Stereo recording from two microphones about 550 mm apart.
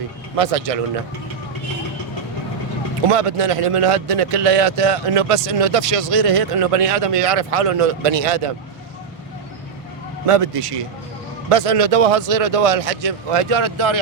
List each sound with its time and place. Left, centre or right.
0.3 s a man's voice: right
3.1 s a man's voice: right
10.2 s a man's voice: right